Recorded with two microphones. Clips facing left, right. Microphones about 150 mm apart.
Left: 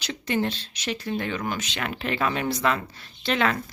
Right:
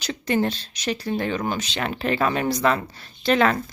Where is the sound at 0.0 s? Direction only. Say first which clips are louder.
Right 3 dB; 40° right (ahead or behind).